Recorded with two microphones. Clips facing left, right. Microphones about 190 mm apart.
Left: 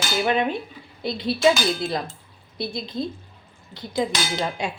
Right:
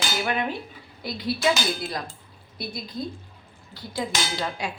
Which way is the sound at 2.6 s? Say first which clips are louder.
Left 5 dB; 25° left (ahead or behind).